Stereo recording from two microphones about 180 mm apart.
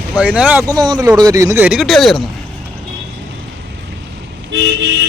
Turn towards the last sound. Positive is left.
turn(degrees=-75)  # may be behind; listen again after turning